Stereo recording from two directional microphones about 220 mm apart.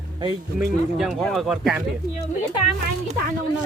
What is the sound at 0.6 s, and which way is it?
Speech, centre (ahead or behind).